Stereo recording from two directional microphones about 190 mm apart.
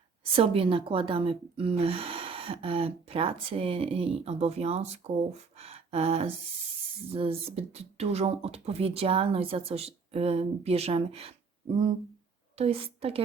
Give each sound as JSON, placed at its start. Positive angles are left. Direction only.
{"t": 0.3, "sound": "speech", "side_deg": -30}
{"t": 5.5, "sound": "a sound", "side_deg": -35}
{"t": 7.1, "sound": "speech", "side_deg": -30}
{"t": 12.5, "sound": "speech", "side_deg": -30}